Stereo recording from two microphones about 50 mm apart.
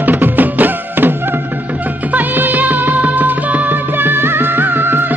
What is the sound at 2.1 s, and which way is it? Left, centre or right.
Music, right.